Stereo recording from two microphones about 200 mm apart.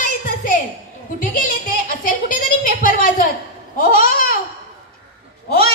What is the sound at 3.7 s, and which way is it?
Babbling, 45° left (ahead or behind).